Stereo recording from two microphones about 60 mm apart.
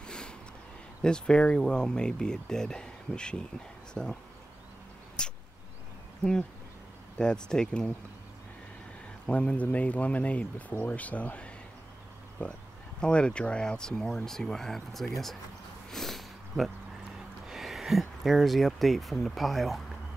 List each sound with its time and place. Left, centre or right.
0.0 s a sound: centre
1.0 s speech: centre
5.2 s a sound: centre
7.2 s speech: centre
9.2 s speech: centre
10.7 s speech: left
11.0 s speech: left; by 15.3 s centre
15.9 s a sound: centre
17.5 s speech: centre